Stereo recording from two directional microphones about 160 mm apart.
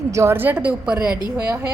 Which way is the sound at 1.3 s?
20° right (ahead or behind).